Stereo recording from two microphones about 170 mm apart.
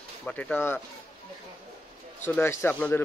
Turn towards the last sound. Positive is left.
turn(degrees=10)  # may be behind; listen again after turning